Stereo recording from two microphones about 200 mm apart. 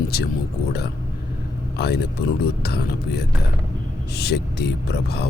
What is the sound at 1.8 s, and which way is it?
Speech, 55° left (ahead or behind).